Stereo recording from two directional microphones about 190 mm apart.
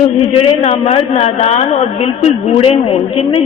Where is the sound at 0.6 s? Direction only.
30° left (ahead or behind).